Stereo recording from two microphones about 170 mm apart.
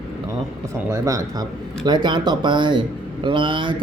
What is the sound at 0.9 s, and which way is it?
Speech, 20° right (ahead or behind).